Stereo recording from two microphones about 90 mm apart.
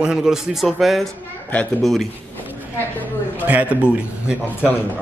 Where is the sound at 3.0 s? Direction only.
20° left (ahead or behind).